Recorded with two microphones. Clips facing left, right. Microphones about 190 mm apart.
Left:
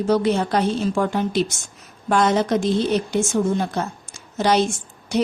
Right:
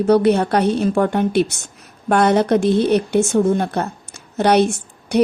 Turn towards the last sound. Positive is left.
turn(degrees=-60)  # may be behind; listen again after turning